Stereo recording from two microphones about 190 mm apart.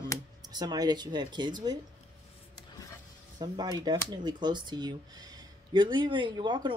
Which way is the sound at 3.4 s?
20° right (ahead or behind).